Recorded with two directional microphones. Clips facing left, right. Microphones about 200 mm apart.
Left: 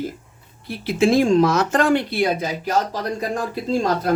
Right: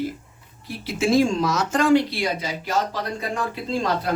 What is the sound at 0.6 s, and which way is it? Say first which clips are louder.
Speech: left 5 dB; 60° left (ahead or behind).